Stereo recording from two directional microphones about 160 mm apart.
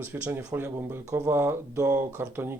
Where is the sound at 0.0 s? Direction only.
10° right (ahead or behind).